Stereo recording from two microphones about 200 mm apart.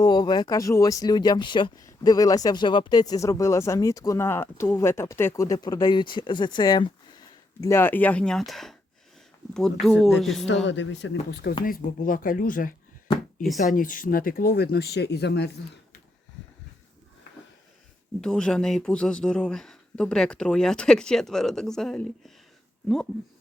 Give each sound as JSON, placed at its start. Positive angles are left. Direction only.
{"t": 0.0, "sound": "speech", "side_deg": 20}
{"t": 9.8, "sound": "speech", "side_deg": 0}
{"t": 10.7, "sound": "speech", "side_deg": 65}
{"t": 11.6, "sound": "speech", "side_deg": 45}
{"t": 18.2, "sound": "speech", "side_deg": 5}